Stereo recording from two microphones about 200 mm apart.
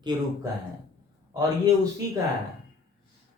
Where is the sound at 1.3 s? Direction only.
20° right (ahead or behind).